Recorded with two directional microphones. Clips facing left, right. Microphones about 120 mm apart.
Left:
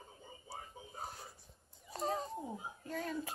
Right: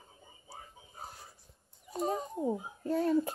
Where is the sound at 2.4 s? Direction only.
35° right (ahead or behind).